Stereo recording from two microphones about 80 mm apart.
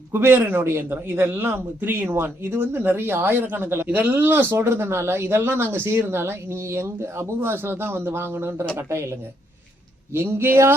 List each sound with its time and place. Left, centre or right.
0.1 s a man's voice: right